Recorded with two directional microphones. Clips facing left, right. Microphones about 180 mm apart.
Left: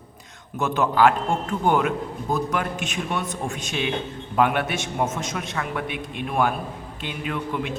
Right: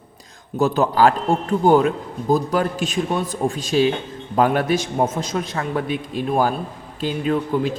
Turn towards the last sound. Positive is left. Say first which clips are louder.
# right 7 dB
turn(degrees=-35)  # may be behind; listen again after turning